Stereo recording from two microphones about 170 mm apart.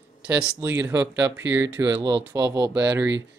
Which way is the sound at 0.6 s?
15° right (ahead or behind).